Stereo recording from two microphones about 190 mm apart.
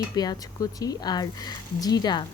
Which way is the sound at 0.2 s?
20° left (ahead or behind).